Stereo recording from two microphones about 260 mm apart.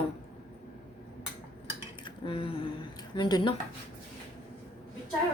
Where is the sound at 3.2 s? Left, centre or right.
Centre.